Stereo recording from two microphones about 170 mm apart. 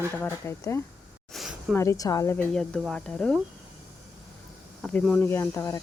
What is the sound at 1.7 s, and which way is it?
Speech, 15° left (ahead or behind).